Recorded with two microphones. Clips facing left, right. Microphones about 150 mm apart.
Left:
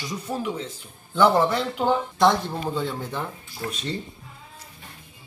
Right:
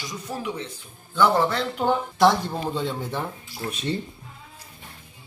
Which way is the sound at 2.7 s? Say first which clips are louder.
Even; 20° right (ahead or behind).